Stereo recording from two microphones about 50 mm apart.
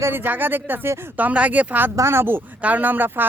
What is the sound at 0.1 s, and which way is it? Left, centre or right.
Speech, right.